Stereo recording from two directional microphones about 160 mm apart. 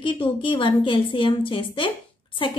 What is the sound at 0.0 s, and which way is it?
A woman's voice, 30° left (ahead or behind).